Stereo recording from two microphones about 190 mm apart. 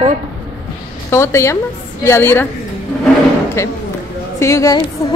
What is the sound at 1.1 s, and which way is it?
A woman's voice, 15° left (ahead or behind).